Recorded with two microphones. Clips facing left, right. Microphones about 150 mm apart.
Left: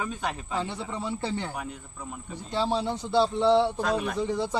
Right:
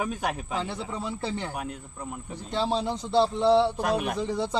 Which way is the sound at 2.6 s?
15° right (ahead or behind).